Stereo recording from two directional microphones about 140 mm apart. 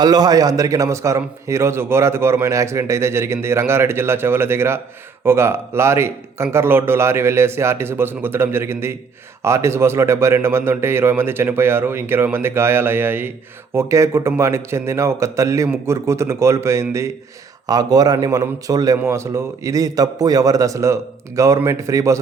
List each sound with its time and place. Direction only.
0.0 s a man's voice: 30° right (ahead or behind)